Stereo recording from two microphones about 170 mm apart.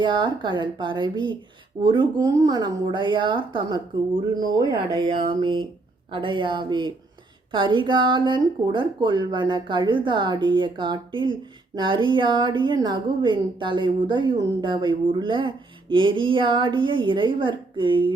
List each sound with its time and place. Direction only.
0.0 s speech: 30° right (ahead or behind)